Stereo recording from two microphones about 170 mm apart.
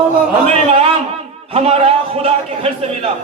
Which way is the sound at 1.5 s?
35° right (ahead or behind).